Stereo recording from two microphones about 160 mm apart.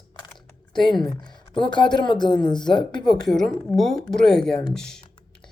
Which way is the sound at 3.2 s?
Centre (ahead or behind).